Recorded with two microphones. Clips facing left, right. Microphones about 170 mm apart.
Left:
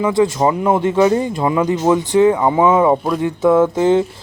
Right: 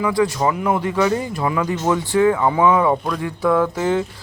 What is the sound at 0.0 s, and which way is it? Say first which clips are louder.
Speech: left 4 dB; 25° left (ahead or behind).